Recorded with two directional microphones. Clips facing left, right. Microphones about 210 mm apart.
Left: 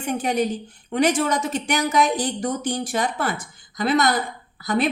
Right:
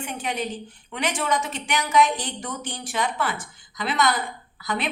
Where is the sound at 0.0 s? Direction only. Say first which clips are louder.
Left 7 dB; 40° left (ahead or behind).